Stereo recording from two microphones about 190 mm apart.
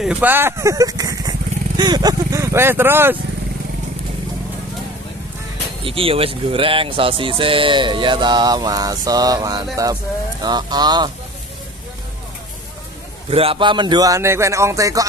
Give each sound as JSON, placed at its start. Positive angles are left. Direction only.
{"t": 0.0, "sound": "speech", "side_deg": -5}
{"t": 5.9, "sound": "speech", "side_deg": -30}
{"t": 13.3, "sound": "speech", "side_deg": -30}